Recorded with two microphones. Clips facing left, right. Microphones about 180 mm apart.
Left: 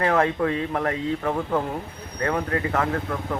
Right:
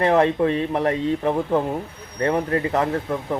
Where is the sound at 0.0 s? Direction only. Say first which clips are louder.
Right 4 dB; 25° right (ahead or behind).